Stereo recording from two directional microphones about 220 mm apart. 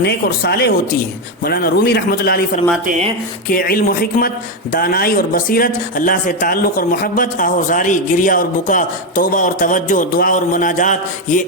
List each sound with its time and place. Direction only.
0.0 s a man's voice: 45° left (ahead or behind)